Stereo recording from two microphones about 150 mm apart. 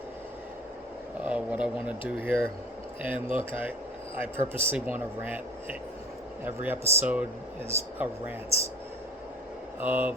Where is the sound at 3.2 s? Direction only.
35° left (ahead or behind).